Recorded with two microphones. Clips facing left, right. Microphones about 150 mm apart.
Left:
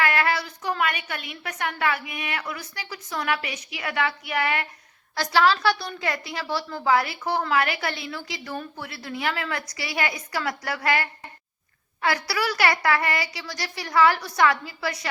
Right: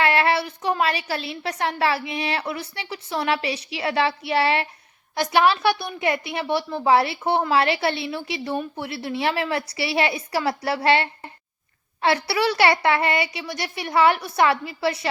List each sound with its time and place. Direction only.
0.0 s a woman's voice: 25° right (ahead or behind)